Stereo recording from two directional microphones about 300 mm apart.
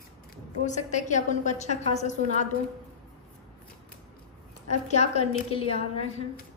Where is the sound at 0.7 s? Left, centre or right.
Left.